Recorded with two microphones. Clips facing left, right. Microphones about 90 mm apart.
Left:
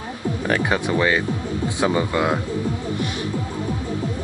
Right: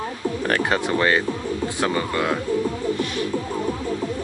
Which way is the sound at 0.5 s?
10° left (ahead or behind).